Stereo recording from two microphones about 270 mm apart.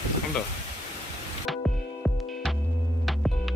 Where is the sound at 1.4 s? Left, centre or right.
Centre.